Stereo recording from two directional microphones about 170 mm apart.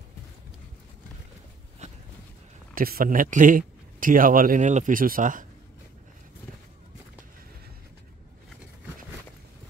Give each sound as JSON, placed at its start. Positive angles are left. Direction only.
{"t": 2.7, "sound": "a man's voice", "side_deg": -60}